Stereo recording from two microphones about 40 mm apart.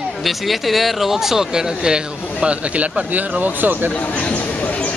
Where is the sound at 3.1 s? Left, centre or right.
Right.